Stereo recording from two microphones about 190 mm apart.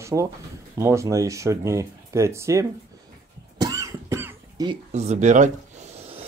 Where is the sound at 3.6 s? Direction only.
20° right (ahead or behind).